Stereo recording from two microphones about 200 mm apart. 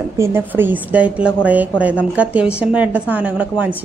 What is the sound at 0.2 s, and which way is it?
A woman's voice, 10° right (ahead or behind).